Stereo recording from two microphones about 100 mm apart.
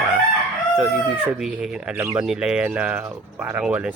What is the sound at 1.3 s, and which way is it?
Speech, 10° right (ahead or behind).